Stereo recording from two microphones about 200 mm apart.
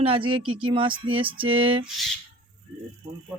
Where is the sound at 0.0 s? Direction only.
25° right (ahead or behind).